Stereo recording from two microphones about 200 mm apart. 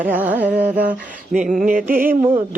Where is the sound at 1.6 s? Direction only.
45° right (ahead or behind).